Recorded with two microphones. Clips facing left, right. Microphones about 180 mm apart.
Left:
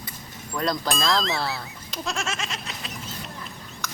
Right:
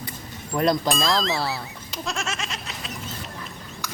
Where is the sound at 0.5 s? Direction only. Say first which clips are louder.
Right 5 dB; 20° right (ahead or behind).